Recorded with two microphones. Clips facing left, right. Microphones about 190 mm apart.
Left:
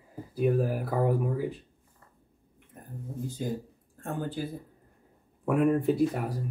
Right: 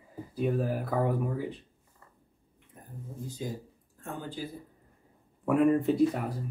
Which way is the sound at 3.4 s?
55° left (ahead or behind).